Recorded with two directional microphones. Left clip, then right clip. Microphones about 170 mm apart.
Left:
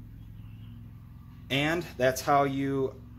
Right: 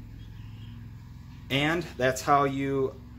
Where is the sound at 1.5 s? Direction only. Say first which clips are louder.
Right 1 dB; 35° left (ahead or behind).